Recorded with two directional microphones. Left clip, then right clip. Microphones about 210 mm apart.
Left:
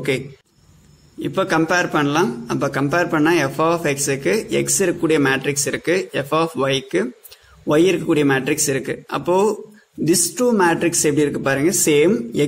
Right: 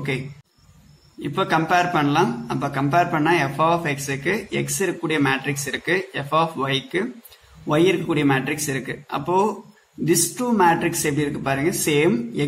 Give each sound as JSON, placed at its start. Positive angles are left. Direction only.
{"t": 1.2, "sound": "a man's voice", "side_deg": 45}